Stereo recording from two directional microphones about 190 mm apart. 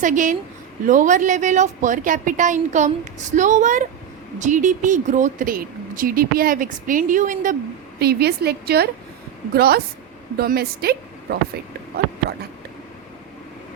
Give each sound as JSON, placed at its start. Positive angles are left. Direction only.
{"t": 0.0, "sound": "a woman's voice", "side_deg": -40}
{"t": 7.9, "sound": "a woman's voice", "side_deg": -55}